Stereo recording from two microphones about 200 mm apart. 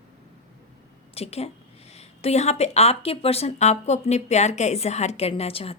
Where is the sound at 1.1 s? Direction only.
30° left (ahead or behind).